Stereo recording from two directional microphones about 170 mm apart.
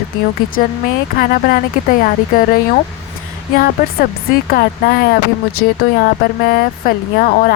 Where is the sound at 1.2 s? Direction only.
60° left (ahead or behind).